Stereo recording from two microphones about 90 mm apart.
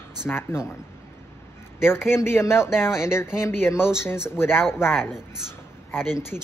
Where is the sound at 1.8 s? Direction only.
25° left (ahead or behind).